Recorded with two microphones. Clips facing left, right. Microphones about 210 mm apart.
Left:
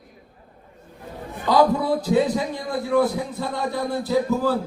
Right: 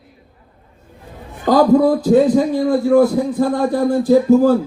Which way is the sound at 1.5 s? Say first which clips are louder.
Right 7 dB; 45° right (ahead or behind).